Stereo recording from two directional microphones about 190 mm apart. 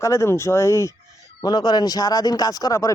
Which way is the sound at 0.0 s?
15° left (ahead or behind).